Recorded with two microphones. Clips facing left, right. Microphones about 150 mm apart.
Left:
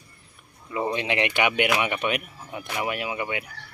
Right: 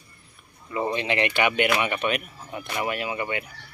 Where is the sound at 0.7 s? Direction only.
10° left (ahead or behind).